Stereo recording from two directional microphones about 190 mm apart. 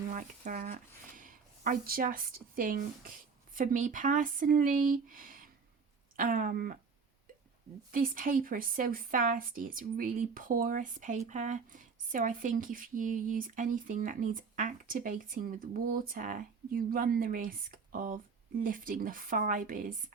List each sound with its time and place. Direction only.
0.1 s speech: 40° right (ahead or behind)
7.9 s speech: 45° right (ahead or behind)